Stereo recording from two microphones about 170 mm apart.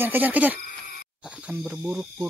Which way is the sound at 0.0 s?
10° right (ahead or behind).